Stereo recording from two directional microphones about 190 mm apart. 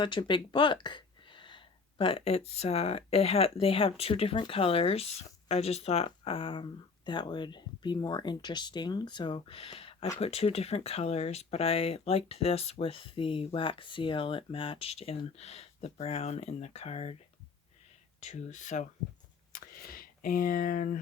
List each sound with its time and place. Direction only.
0.0 s speech: 25° left (ahead or behind)
18.2 s speech: 35° left (ahead or behind)